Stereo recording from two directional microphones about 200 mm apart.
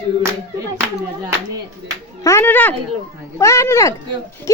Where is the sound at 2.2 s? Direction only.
10° left (ahead or behind).